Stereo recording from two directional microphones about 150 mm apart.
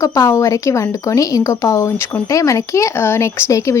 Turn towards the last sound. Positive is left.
turn(degrees=20)  # may be behind; listen again after turning